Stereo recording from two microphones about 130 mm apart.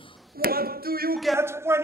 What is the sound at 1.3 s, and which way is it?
Speech, 20° right (ahead or behind).